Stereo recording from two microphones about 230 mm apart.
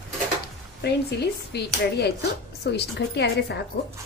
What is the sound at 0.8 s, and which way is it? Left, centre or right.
A woman's voice, left.